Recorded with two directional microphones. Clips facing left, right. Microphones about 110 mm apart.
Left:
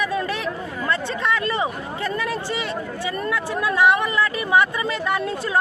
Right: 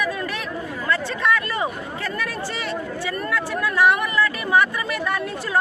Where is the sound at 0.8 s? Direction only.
25° left (ahead or behind).